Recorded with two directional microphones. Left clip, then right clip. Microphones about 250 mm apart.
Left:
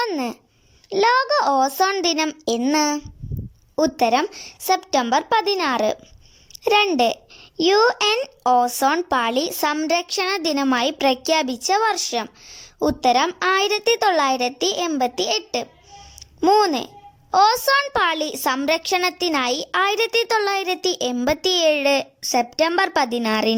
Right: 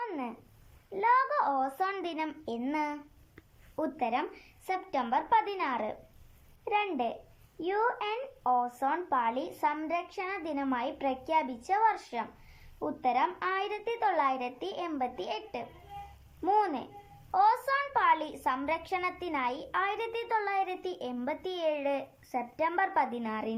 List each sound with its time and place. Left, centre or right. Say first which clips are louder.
0.0 s babbling: left 13 dB; left
0.9 s a woman's voice: left 10 dB; left